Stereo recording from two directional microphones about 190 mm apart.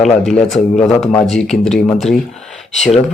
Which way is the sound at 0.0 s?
Centre (ahead or behind).